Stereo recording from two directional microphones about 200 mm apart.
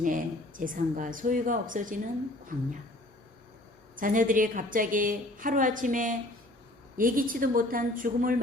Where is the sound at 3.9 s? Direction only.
45° right (ahead or behind).